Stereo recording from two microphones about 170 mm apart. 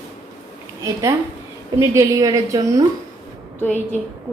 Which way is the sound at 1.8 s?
20° right (ahead or behind).